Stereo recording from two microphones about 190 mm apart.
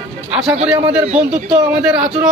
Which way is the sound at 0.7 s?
25° right (ahead or behind).